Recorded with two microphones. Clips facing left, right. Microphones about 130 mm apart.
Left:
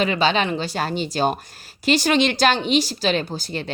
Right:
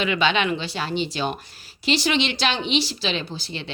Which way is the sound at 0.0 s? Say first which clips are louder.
Left 2 dB; 35° left (ahead or behind).